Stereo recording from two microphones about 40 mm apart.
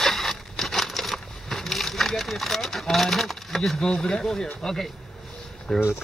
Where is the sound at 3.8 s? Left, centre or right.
Centre.